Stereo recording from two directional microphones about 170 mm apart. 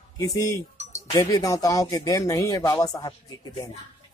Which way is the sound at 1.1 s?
20° left (ahead or behind).